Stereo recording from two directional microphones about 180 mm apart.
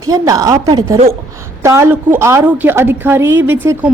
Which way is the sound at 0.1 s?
20° right (ahead or behind).